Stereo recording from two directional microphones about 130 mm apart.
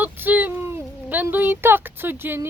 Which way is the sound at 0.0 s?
15° right (ahead or behind).